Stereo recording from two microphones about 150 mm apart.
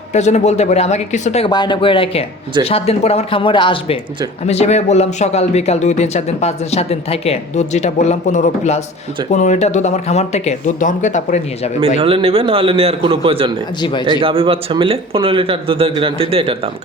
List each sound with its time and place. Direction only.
0.1 s speech: 50° left (ahead or behind)
1.5 s speech: 30° left (ahead or behind)
4.4 s speech: 45° left (ahead or behind)
11.9 s speech: 35° right (ahead or behind)